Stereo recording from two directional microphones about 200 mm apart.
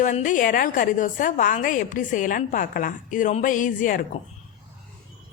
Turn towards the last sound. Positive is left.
turn(degrees=40)  # may be behind; listen again after turning